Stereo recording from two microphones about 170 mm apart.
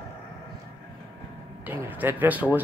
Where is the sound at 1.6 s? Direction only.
10° right (ahead or behind).